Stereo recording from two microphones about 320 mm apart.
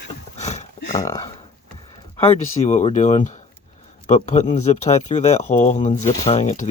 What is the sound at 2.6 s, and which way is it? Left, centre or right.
Speech, left.